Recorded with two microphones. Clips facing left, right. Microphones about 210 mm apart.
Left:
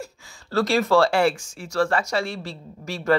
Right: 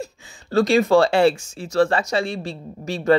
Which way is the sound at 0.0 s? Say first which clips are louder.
Right 4 dB; 15° right (ahead or behind).